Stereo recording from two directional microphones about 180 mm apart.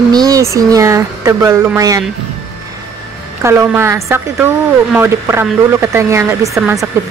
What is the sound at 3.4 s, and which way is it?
Speech, 15° right (ahead or behind).